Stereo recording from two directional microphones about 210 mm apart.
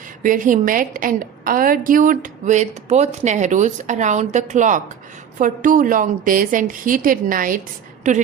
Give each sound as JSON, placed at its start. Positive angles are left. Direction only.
{"t": 0.2, "sound": "a woman's voice", "side_deg": -40}